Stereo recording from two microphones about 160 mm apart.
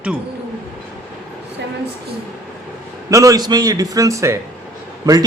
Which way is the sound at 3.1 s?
20° right (ahead or behind).